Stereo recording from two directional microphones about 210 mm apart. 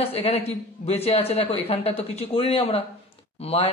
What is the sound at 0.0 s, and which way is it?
Speech, 30° left (ahead or behind).